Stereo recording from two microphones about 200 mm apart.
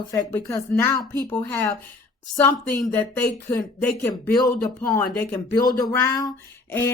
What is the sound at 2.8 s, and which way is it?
A woman's voice, 10° left (ahead or behind).